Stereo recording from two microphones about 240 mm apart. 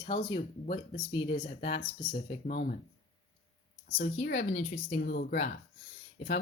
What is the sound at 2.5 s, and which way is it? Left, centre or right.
Speech, left.